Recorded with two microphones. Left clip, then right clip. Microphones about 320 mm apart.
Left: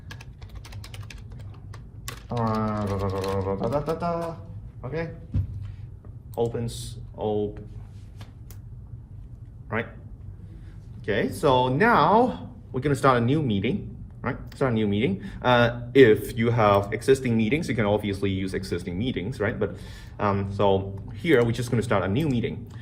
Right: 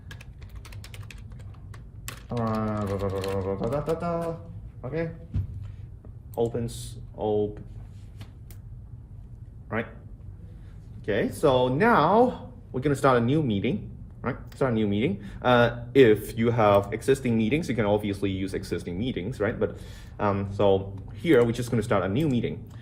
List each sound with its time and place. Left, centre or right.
0.1 s typing: centre
2.4 s music: centre
3.5 s didgeridoo: centre
4.8 s a man's voice: left
6.5 s a man's voice: left
11.0 s a man's voice: left